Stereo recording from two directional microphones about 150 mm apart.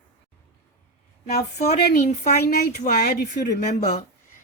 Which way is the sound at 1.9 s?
50° left (ahead or behind).